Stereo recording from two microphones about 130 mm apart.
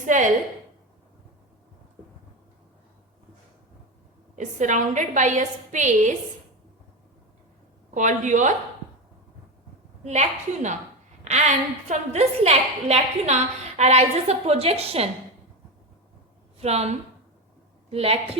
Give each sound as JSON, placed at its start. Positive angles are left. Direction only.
{"t": 0.0, "sound": "a woman's voice", "side_deg": -75}
{"t": 4.4, "sound": "a woman's voice", "side_deg": -75}
{"t": 7.9, "sound": "a woman's voice", "side_deg": -70}
{"t": 10.0, "sound": "a woman's voice", "side_deg": -60}
{"t": 16.6, "sound": "speech", "side_deg": -55}
{"t": 17.9, "sound": "a woman's voice", "side_deg": -50}